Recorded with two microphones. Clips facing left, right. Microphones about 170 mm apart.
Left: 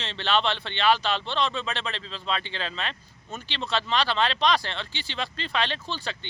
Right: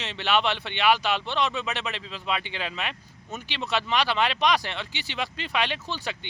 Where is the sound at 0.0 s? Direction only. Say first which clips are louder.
Right 1 dB; 10° right (ahead or behind).